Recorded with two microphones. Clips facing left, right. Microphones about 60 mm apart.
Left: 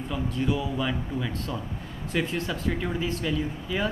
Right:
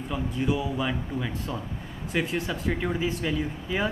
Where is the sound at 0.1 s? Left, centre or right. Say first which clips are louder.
Even; centre.